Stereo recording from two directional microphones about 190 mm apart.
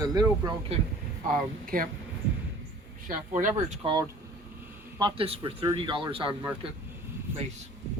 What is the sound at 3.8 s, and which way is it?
Speech, 25° right (ahead or behind).